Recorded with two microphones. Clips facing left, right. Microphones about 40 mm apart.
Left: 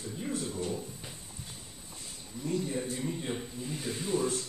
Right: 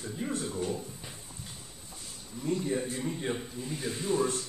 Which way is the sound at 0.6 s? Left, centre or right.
Centre.